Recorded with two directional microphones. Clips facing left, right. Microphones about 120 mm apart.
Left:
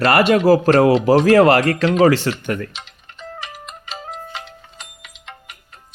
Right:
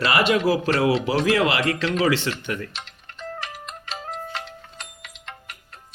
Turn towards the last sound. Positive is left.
turn(degrees=0)  # may be behind; listen again after turning